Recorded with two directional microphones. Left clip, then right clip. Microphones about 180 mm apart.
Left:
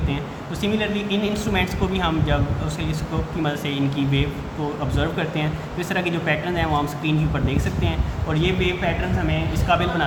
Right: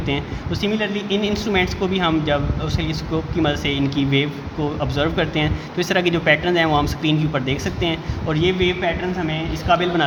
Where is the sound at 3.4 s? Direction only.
40° right (ahead or behind).